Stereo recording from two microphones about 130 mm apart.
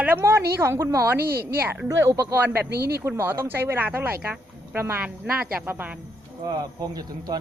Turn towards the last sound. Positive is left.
turn(degrees=-30)  # may be behind; listen again after turning